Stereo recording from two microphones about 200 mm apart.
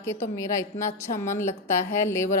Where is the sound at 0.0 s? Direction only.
15° left (ahead or behind).